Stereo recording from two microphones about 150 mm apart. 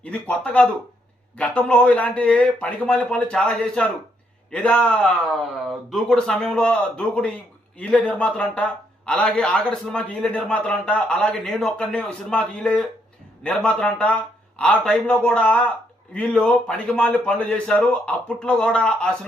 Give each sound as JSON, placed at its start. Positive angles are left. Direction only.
{"t": 0.0, "sound": "a man's voice", "side_deg": 5}